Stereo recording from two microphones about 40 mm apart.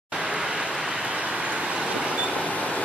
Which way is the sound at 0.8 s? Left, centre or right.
Right.